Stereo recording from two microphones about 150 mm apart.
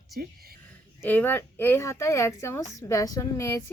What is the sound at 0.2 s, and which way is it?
Speech, 85° right.